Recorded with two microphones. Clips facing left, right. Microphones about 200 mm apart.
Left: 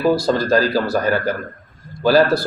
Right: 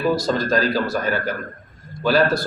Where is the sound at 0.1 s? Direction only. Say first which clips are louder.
Left 4 dB; 35° left (ahead or behind).